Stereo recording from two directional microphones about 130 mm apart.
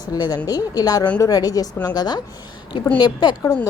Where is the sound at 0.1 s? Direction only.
30° left (ahead or behind).